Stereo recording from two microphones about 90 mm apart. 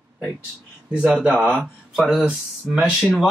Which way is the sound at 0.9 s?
10° right (ahead or behind).